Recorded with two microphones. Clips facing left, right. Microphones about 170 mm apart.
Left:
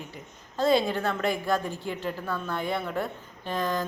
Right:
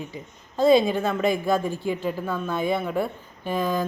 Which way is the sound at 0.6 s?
15° right (ahead or behind).